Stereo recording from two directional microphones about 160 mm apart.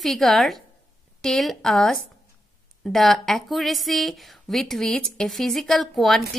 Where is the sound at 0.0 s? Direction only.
Centre (ahead or behind).